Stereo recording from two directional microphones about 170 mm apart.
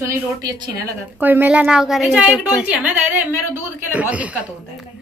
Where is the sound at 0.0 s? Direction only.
20° right (ahead or behind).